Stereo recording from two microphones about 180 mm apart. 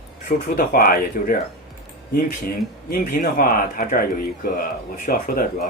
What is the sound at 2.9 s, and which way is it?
Speech, 50° left (ahead or behind).